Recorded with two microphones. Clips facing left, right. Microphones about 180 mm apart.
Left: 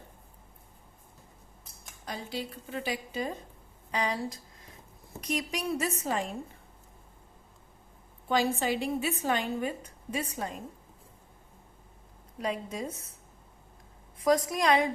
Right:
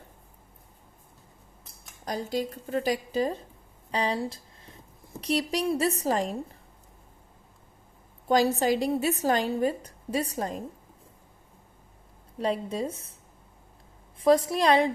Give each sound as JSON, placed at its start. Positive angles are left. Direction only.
{"t": 2.0, "sound": "a woman's voice", "side_deg": -40}
{"t": 8.3, "sound": "a woman's voice", "side_deg": -40}
{"t": 12.4, "sound": "a woman's voice", "side_deg": -30}
{"t": 14.2, "sound": "a woman's voice", "side_deg": -30}